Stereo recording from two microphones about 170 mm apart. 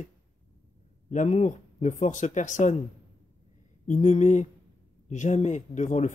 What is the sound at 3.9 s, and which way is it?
Speech, 45° left (ahead or behind).